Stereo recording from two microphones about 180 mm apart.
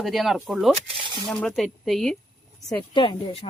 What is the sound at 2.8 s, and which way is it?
Speech, 25° left (ahead or behind).